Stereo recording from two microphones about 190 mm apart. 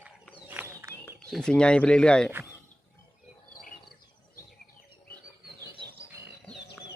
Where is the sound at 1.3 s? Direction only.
5° left (ahead or behind).